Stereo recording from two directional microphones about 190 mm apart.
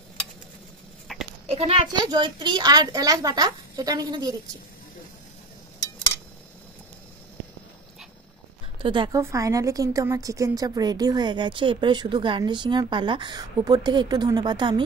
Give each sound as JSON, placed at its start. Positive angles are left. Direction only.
{"t": 1.1, "sound": "goat", "side_deg": 0}
{"t": 1.5, "sound": "a woman's voice", "side_deg": -30}
{"t": 8.8, "sound": "a woman's voice", "side_deg": -25}